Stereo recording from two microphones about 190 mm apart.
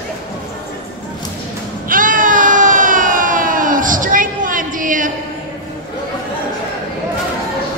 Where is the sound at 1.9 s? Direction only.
45° right (ahead or behind).